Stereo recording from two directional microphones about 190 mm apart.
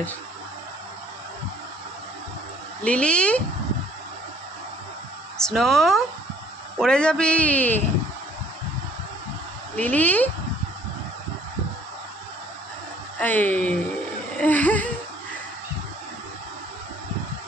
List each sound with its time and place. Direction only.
2.8 s speech: 5° left (ahead or behind)
5.5 s a man's voice: centre (ahead or behind)
9.8 s speech: 10° left (ahead or behind)
13.2 s speech: 10° left (ahead or behind)
14.3 s a sound: 10° left (ahead or behind)